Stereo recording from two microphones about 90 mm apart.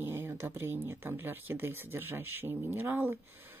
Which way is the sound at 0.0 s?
25° right (ahead or behind).